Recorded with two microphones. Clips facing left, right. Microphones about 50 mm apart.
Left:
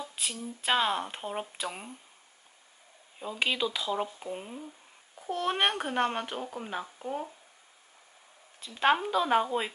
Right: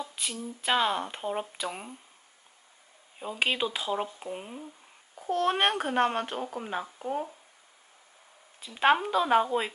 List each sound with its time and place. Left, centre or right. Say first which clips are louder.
0.0 s a sound: right 1 dB; centre
0.4 s a child's voice: right 1 dB; centre
3.2 s speech: right 1 dB; right
4.0 s a child's voice: even; centre
8.5 s a child's voice: right 2 dB; centre